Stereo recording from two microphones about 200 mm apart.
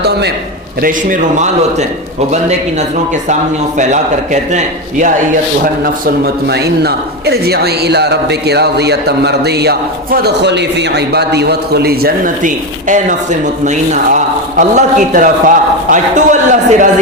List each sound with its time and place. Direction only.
0.8 s a man's voice: 40° right (ahead or behind)
3.8 s a man's voice: 35° right (ahead or behind)
5.8 s a man's voice: 50° right (ahead or behind)